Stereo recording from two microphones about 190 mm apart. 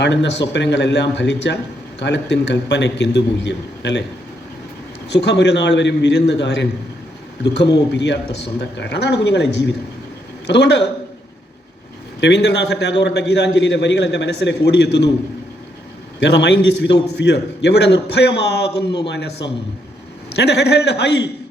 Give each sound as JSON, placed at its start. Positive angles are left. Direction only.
{"t": 0.0, "sound": "a man's voice", "side_deg": 65}
{"t": 5.0, "sound": "a man's voice", "side_deg": 65}
{"t": 12.2, "sound": "a man's voice", "side_deg": 65}
{"t": 16.2, "sound": "a man's voice", "side_deg": 65}